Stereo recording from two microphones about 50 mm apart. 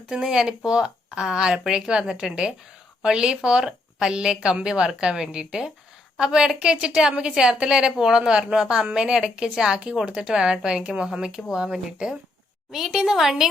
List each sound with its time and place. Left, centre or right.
0.1 s a woman's voice: centre